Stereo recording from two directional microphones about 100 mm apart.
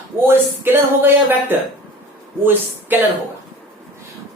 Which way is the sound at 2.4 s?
20° right (ahead or behind).